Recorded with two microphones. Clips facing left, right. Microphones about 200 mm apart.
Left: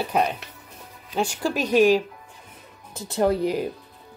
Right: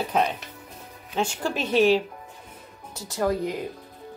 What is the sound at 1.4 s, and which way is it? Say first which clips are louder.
Speech: left 3 dB; 40° left (ahead or behind).